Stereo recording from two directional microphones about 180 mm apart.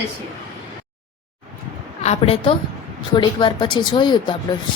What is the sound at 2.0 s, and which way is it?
A woman's voice, 30° left (ahead or behind).